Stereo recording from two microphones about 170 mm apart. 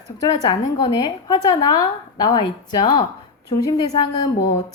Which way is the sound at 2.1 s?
25° left (ahead or behind).